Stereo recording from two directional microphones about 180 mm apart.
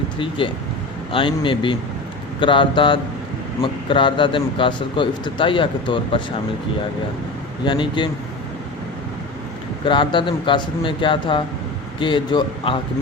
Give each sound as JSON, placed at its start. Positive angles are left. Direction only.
{"t": 0.2, "sound": "speech", "side_deg": 30}
{"t": 7.6, "sound": "speech", "side_deg": 25}
{"t": 9.8, "sound": "speech", "side_deg": 25}